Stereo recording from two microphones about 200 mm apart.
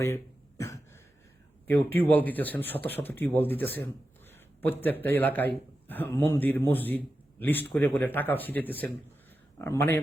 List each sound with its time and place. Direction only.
0.0 s cough: 15° left (ahead or behind)
1.6 s a man's voice: 10° left (ahead or behind)